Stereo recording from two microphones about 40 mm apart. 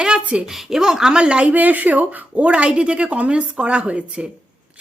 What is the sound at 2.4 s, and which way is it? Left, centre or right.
A woman's voice, right.